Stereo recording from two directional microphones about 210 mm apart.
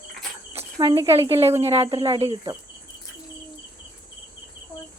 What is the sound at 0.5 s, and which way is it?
Cricket, 25° right (ahead or behind).